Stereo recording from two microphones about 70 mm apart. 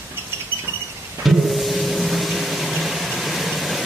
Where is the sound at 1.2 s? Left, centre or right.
Centre.